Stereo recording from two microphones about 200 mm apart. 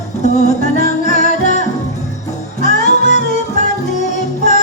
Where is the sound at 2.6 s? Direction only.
35° left (ahead or behind).